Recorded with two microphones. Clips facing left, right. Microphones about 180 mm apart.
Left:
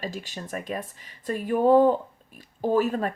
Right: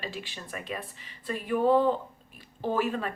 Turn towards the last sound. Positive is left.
turn(degrees=45)  # may be behind; listen again after turning